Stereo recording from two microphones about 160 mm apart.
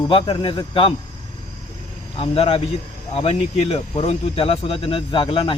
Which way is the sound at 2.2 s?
35° left (ahead or behind).